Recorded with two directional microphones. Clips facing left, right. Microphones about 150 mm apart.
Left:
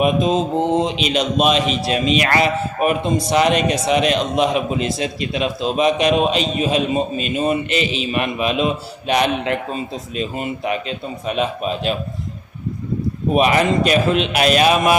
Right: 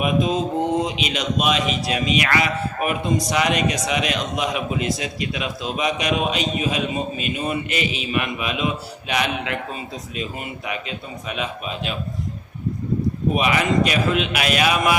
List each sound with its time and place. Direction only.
0.0 s a man's voice: 25° left (ahead or behind)
13.3 s a man's voice: 40° left (ahead or behind)